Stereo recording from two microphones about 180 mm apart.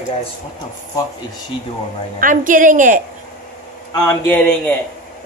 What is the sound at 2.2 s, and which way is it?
Speech, 50° right (ahead or behind).